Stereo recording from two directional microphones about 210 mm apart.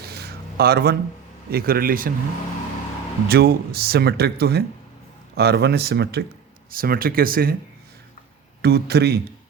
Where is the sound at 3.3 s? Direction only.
50° right (ahead or behind).